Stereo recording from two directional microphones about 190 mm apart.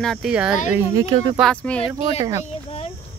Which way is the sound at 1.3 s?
5° left (ahead or behind).